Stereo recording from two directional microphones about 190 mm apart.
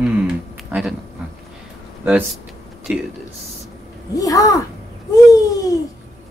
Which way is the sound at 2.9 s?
5° right (ahead or behind).